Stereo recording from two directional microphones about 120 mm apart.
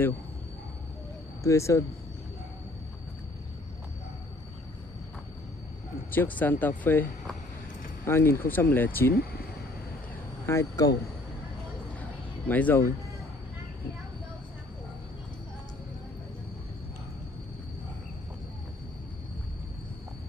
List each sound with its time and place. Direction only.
1.4 s speech: 25° left (ahead or behind)
6.1 s speech: 15° left (ahead or behind)
10.4 s speech: 25° left (ahead or behind)
12.0 s a sound: 15° left (ahead or behind)